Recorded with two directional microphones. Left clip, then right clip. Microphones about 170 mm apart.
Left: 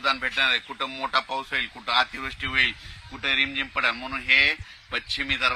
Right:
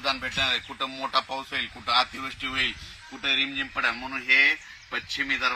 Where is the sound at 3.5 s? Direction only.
50° left (ahead or behind).